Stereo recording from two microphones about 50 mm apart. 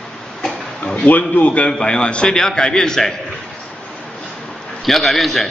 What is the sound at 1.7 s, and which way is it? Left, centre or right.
A man's voice, centre.